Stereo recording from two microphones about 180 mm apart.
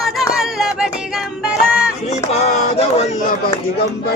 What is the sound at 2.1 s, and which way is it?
Music, 35° left (ahead or behind).